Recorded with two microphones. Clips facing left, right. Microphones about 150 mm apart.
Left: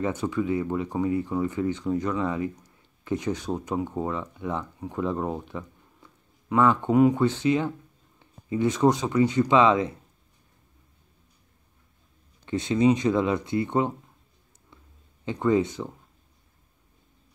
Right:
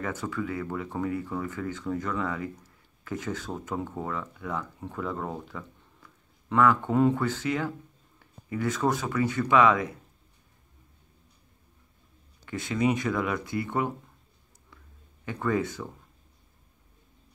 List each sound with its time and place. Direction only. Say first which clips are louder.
0.0 s speech: left 5 dB; 20° left (ahead or behind)
12.4 s speech: left 5 dB; 20° left (ahead or behind)
15.2 s speech: left 5 dB; 20° left (ahead or behind)